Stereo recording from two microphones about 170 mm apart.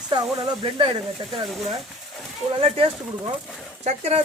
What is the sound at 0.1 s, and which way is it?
Speech, 30° right (ahead or behind).